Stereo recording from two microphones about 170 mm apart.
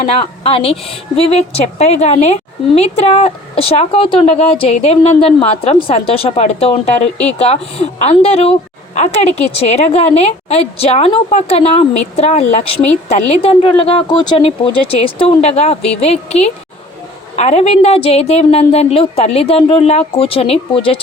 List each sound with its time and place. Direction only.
0.0 s a woman's voice: 35° left (ahead or behind)